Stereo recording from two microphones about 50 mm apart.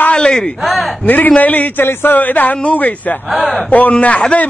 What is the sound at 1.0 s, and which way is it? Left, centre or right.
A man's voice, left.